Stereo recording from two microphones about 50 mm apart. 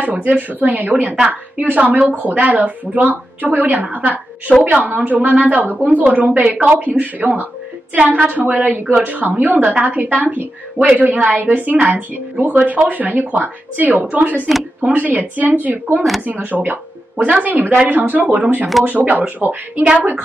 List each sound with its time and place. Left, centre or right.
0.0 s speech: right